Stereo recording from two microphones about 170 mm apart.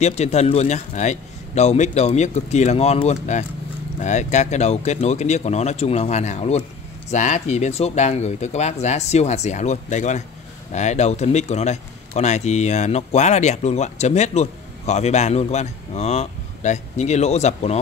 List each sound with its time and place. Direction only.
0.0 s speech: 40° left (ahead or behind)